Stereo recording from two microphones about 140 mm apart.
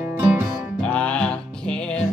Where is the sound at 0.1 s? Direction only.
15° right (ahead or behind).